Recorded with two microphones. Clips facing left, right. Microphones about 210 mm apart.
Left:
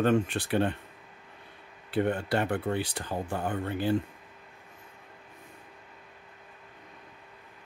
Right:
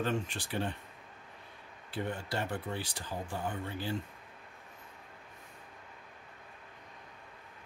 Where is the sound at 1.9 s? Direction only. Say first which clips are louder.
Left 9 dB; 60° left (ahead or behind).